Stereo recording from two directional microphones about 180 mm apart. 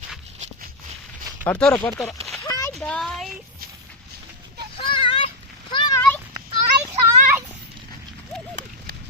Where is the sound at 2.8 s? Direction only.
5° left (ahead or behind).